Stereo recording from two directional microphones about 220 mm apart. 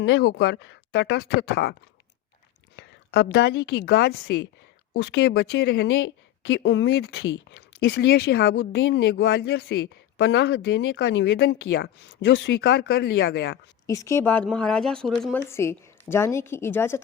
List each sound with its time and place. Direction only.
0.0 s speech: 50° left (ahead or behind)
2.7 s a woman's voice: 50° left (ahead or behind)
13.8 s speech: 15° left (ahead or behind)